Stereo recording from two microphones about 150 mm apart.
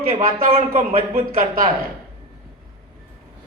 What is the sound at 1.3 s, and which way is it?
Speech, 65° right (ahead or behind).